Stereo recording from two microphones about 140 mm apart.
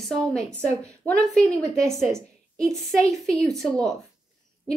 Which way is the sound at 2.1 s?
20° right (ahead or behind).